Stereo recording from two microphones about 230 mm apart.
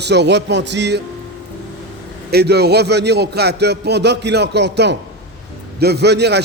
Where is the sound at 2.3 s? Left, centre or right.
Right.